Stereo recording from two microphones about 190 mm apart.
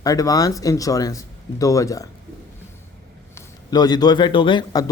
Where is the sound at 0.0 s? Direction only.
20° left (ahead or behind).